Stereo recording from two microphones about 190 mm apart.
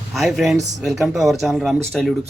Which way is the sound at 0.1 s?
Centre (ahead or behind).